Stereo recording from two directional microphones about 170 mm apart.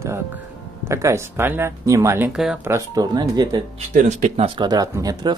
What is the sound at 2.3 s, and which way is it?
Speech, 5° right (ahead or behind).